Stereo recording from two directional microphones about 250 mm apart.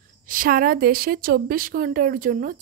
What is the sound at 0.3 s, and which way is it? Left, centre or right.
A woman's voice, right.